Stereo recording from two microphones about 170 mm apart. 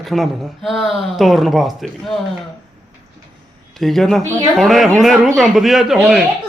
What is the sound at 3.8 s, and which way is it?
A man's voice, centre (ahead or behind).